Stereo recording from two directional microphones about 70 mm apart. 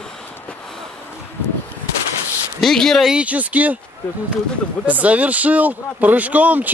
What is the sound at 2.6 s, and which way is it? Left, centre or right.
Speech, centre.